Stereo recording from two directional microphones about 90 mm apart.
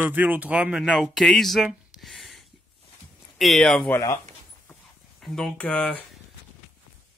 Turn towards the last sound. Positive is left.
turn(degrees=15)  # may be behind; listen again after turning